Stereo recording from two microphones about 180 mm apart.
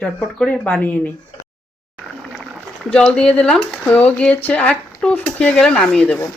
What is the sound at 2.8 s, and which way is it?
Speech, 5° left (ahead or behind).